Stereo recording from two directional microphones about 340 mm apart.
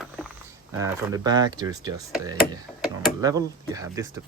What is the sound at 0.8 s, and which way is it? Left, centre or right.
Speech, centre.